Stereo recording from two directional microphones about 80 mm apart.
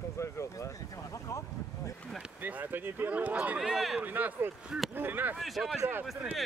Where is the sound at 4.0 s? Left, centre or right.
Right.